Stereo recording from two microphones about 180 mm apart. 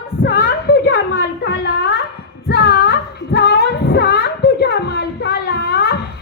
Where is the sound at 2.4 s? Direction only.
60° left (ahead or behind).